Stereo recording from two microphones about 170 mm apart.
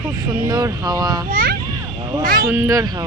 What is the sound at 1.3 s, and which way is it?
Speech, 55° right (ahead or behind).